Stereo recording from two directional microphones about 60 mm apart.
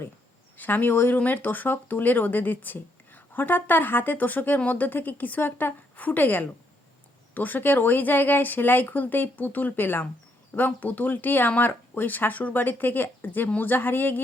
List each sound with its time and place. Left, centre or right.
0.5 s speech: left